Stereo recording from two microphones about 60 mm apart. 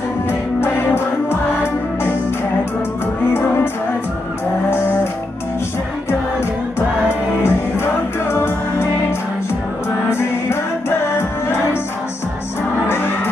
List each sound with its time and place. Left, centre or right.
0.6 s music: left
7.4 s music: left
12.8 s music: left